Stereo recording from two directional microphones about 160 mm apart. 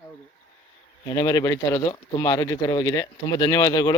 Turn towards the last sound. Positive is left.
turn(degrees=25)  # may be behind; listen again after turning